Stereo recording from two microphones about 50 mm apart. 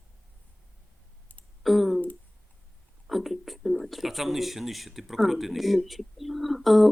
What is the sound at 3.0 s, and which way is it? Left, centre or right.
Speech, centre.